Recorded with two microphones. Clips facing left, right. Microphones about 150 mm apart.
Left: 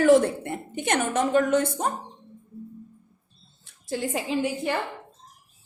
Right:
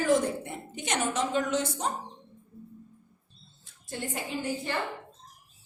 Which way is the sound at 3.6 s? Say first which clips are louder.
Left 8 dB; 90° left.